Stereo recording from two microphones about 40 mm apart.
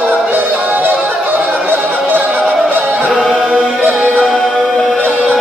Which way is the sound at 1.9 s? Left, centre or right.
Right.